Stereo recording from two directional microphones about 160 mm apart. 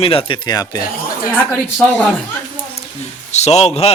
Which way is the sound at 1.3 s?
5° left (ahead or behind).